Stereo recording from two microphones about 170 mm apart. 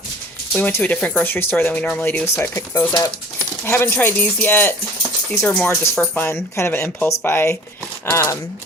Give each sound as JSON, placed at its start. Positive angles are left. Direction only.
{"t": 0.5, "sound": "speech", "side_deg": 10}